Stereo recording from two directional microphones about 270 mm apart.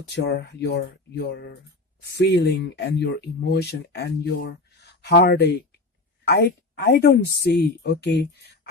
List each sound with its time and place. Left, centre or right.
0.1 s speech: left